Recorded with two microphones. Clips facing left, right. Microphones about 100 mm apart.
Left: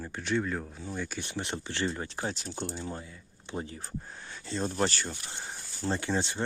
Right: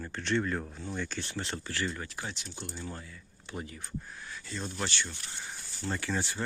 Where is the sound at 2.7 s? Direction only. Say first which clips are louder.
Left 3 dB; 25° left (ahead or behind).